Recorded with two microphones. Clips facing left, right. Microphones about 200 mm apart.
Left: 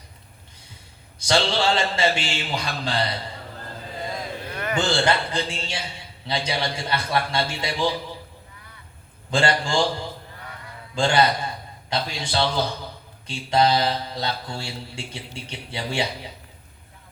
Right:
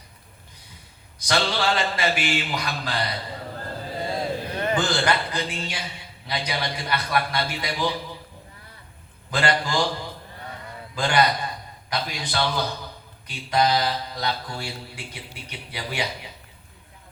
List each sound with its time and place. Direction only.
1.2 s mantra: 25° left (ahead or behind)
4.1 s a sound: 30° right (ahead or behind)
5.0 s mantra: 25° left (ahead or behind)
9.3 s mantra: 25° left (ahead or behind)
10.9 s mantra: 25° left (ahead or behind)